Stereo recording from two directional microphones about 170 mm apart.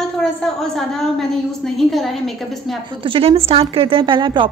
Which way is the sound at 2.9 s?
30° right (ahead or behind).